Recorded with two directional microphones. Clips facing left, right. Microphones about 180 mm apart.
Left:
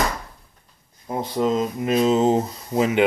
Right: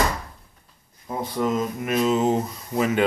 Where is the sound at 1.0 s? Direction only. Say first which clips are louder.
Left 3 dB; 25° left (ahead or behind).